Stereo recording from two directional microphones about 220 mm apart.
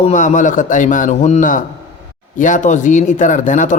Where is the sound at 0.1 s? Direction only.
35° left (ahead or behind).